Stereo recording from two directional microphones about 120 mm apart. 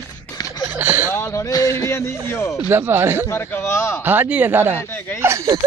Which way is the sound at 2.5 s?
15° right (ahead or behind).